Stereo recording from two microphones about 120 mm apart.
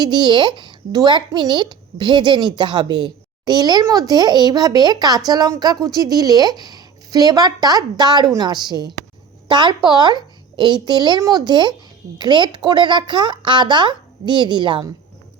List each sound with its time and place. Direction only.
0.0 s a child's voice: 40° right (ahead or behind)